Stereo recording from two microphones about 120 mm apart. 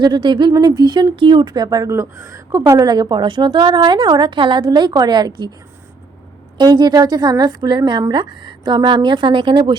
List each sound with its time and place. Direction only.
0.0 s speech: 40° right (ahead or behind)
6.6 s speech: 35° right (ahead or behind)